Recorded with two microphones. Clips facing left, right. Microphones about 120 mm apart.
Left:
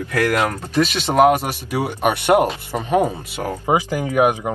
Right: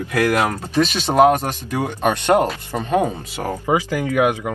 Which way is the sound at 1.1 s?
10° left (ahead or behind).